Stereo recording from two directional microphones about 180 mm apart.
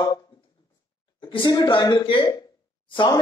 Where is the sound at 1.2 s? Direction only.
25° left (ahead or behind).